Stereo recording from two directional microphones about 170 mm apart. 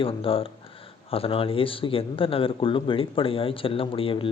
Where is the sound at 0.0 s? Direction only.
30° left (ahead or behind).